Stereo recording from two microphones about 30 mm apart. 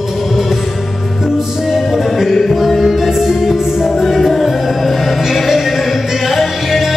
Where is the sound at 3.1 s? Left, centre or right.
Centre.